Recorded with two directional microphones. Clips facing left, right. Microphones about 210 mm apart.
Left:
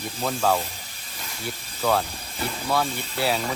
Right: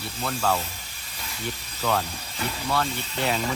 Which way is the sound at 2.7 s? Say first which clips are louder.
Left 2 dB; 10° left (ahead or behind).